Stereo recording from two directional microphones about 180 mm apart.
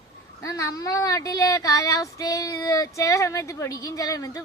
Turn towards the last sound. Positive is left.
turn(degrees=20)  # may be behind; listen again after turning